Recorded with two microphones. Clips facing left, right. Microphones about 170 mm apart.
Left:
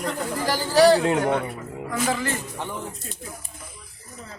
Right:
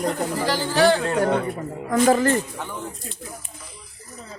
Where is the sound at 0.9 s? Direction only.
15° left (ahead or behind).